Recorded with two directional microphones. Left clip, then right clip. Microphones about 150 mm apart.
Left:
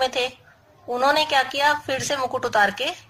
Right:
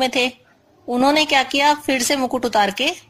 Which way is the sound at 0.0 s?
35° right (ahead or behind).